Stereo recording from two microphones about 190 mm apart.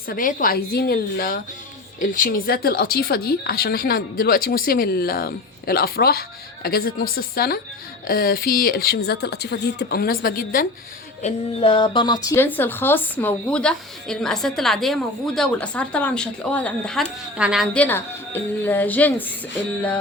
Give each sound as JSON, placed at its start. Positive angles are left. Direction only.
{"t": 0.1, "sound": "speech", "side_deg": 45}
{"t": 11.2, "sound": "a woman's voice", "side_deg": 30}
{"t": 17.8, "sound": "speech", "side_deg": 10}